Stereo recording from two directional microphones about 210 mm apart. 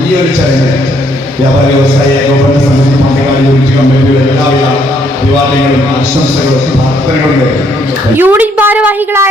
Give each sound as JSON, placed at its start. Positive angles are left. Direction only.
{"t": 8.2, "sound": "a woman's voice", "side_deg": -10}